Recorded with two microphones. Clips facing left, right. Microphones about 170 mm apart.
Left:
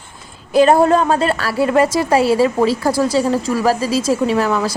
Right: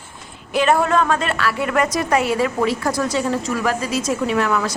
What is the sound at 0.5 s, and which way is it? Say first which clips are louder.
A woman's voice: left 5 dB; 35° left (ahead or behind).